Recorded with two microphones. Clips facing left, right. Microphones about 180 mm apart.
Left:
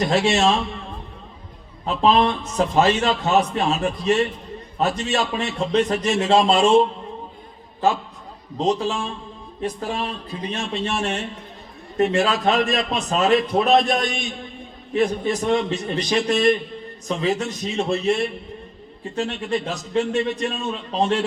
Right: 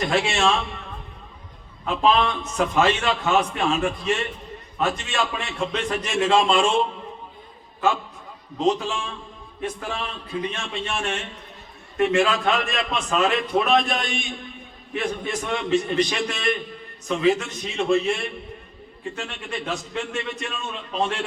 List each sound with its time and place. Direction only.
0.0 s a man's voice: 40° left (ahead or behind)
1.8 s a man's voice: 35° left (ahead or behind)
8.6 s a man's voice: 35° left (ahead or behind)
15.4 s a man's voice: 35° left (ahead or behind)